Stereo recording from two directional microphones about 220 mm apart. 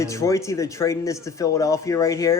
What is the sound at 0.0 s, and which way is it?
A man's voice, 15° left (ahead or behind).